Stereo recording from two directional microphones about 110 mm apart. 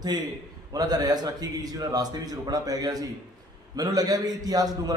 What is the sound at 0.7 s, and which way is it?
A man's voice, 35° right (ahead or behind).